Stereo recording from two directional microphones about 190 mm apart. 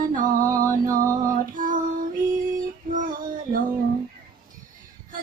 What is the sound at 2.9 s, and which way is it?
Female singing, 45° right (ahead or behind).